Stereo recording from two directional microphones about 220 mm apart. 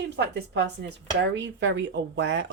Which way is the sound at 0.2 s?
50° right (ahead or behind).